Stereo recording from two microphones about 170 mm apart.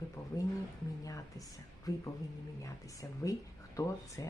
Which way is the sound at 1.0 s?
20° left (ahead or behind).